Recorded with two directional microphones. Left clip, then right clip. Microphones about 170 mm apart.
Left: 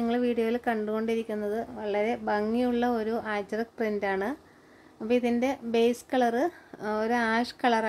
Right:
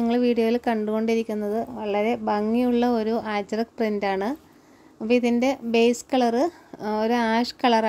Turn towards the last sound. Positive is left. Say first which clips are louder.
# right 5 dB
turn(degrees=-20)  # may be behind; listen again after turning